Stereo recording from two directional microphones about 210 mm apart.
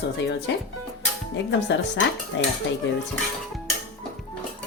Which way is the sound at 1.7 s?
60° left (ahead or behind).